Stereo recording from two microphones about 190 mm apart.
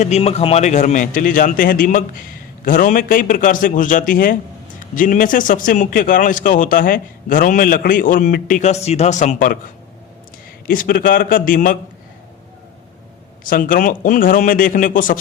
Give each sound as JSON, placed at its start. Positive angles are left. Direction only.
{"t": 0.0, "sound": "a man's voice", "side_deg": 35}
{"t": 10.7, "sound": "a man's voice", "side_deg": 50}
{"t": 13.4, "sound": "a man's voice", "side_deg": 45}